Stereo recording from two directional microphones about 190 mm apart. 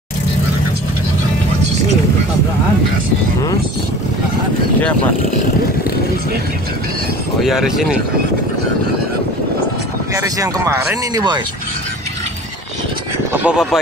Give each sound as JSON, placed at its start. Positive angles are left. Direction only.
{"t": 7.4, "sound": "speech", "side_deg": 0}
{"t": 10.1, "sound": "speech", "side_deg": -15}
{"t": 13.3, "sound": "speech", "side_deg": -5}